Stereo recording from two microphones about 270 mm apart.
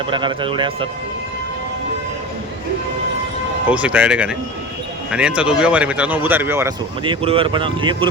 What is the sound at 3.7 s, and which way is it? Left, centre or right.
Speech, centre.